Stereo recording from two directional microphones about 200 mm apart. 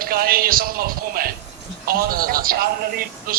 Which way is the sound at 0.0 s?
45° right (ahead or behind).